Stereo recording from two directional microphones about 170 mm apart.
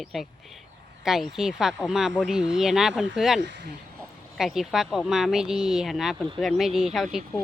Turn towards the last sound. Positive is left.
turn(degrees=0)  # may be behind; listen again after turning